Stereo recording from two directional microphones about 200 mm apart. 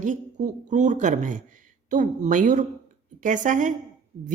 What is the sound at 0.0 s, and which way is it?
A woman's voice, 35° right (ahead or behind).